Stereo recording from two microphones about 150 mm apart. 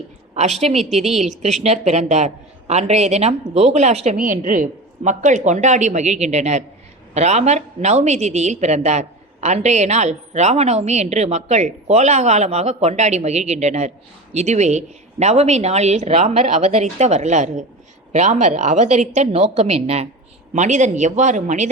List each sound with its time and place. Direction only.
0.6 s a woman's voice: 45° right (ahead or behind)